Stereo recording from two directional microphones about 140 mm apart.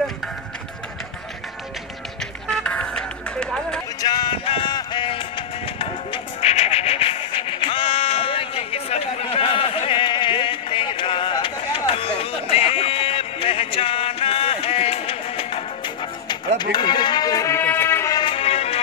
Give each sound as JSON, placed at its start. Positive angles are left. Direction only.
{"t": 2.5, "sound": "music", "side_deg": 5}
{"t": 4.0, "sound": "music", "side_deg": 30}
{"t": 18.1, "sound": "music", "side_deg": 40}